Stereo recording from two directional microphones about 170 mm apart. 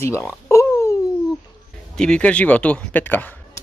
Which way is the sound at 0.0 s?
15° left (ahead or behind).